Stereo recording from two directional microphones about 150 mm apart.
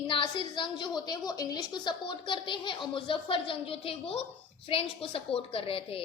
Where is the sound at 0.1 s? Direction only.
30° left (ahead or behind).